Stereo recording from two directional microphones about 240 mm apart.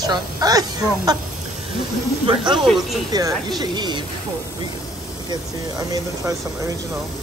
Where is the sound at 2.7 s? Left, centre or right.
Centre.